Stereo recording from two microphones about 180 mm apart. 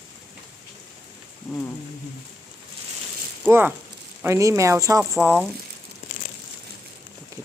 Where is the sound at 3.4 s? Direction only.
10° right (ahead or behind).